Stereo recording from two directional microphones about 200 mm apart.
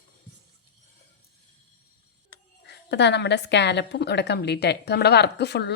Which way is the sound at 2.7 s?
60° left (ahead or behind).